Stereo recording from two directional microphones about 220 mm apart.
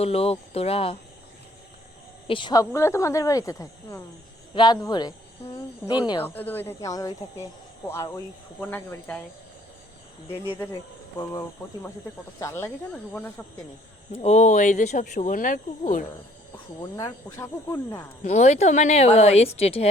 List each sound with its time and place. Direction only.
0.0 s a woman's voice: 25° left (ahead or behind)
2.2 s a woman's voice: 20° left (ahead or behind)
6.2 s speech: 10° left (ahead or behind)
11.2 s speech: 15° left (ahead or behind)
14.1 s speech: 30° left (ahead or behind)
16.8 s speech: 15° left (ahead or behind)
18.2 s a woman's voice: 30° left (ahead or behind)